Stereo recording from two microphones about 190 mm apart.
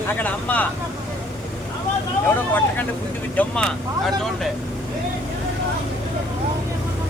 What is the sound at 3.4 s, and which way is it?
Speech, 5° left (ahead or behind).